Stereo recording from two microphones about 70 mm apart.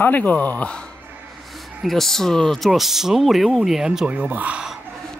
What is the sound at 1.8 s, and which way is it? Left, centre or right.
Speech, centre.